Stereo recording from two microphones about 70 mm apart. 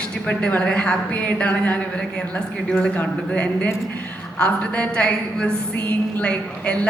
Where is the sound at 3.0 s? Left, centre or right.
Left.